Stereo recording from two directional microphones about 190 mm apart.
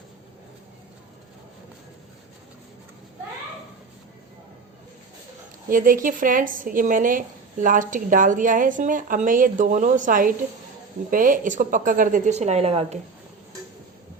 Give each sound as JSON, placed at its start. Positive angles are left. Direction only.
{"t": 5.6, "sound": "speech", "side_deg": -45}